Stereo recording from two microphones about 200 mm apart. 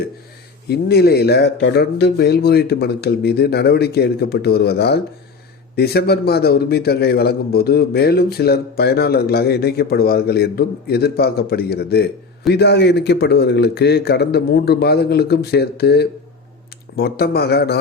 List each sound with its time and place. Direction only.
0.7 s a man's voice: 50° left (ahead or behind)